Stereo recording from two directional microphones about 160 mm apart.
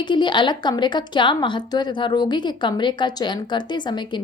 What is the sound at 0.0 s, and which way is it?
A woman's voice, 30° left (ahead or behind).